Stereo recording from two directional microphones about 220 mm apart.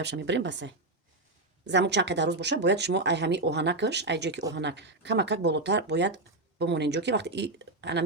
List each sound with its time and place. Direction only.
0.0 s speech: 50° right (ahead or behind)